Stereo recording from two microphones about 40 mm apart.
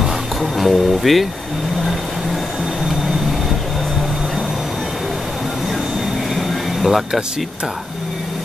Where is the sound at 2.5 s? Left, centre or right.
Centre.